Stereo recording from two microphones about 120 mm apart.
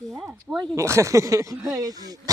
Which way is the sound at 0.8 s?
25° right (ahead or behind).